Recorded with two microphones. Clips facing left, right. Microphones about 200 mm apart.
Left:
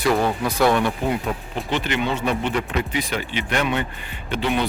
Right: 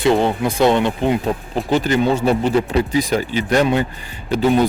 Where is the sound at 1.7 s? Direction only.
40° right (ahead or behind).